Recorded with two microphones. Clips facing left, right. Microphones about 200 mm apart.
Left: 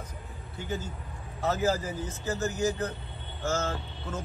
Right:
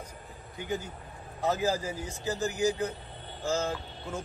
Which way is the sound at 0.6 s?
15° right (ahead or behind).